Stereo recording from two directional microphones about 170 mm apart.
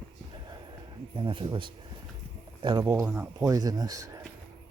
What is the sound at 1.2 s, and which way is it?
Speech, 30° right (ahead or behind).